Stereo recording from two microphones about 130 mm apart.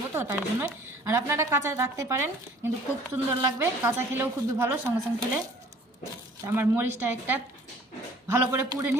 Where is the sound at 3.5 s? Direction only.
20° right (ahead or behind).